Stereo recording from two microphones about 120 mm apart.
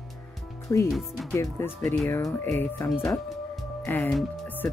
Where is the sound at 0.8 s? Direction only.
Centre (ahead or behind).